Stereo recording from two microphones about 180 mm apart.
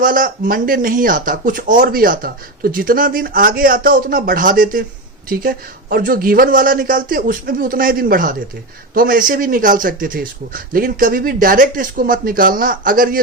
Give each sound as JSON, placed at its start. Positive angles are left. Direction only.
{"t": 0.0, "sound": "speech", "side_deg": -50}